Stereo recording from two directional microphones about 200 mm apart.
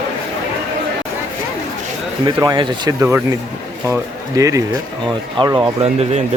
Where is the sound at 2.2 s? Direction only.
20° right (ahead or behind).